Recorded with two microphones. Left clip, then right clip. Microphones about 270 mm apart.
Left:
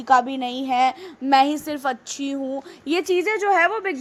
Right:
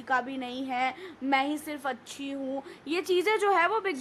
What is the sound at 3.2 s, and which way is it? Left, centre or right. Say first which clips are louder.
Speech: left 5 dB; centre.